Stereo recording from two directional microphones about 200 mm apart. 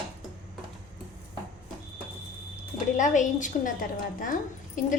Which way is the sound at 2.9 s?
40° left (ahead or behind).